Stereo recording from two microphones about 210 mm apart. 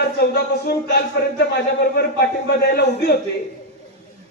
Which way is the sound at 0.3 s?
50° left (ahead or behind).